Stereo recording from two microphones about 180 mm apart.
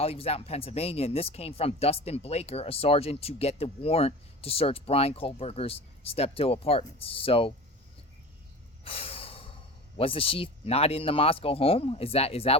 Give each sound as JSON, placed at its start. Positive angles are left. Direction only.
{"t": 0.0, "sound": "speech", "side_deg": 35}
{"t": 8.8, "sound": "snort", "side_deg": 35}
{"t": 10.0, "sound": "speech", "side_deg": 30}